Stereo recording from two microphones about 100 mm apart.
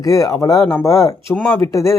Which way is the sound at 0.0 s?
35° left (ahead or behind).